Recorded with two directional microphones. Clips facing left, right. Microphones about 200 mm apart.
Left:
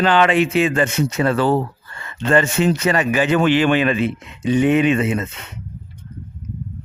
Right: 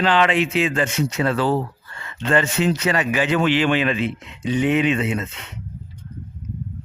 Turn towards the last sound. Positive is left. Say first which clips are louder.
# left 3 dB
turn(degrees=50)  # may be behind; listen again after turning